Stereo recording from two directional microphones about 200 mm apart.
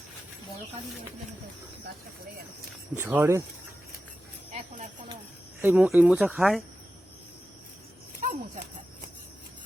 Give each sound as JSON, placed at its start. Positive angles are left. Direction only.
{"t": 2.9, "sound": "speech", "side_deg": -10}
{"t": 5.5, "sound": "speech", "side_deg": -10}
{"t": 8.2, "sound": "speech", "side_deg": -45}